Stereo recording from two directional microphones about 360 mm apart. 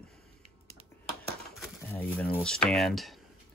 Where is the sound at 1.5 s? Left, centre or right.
Centre.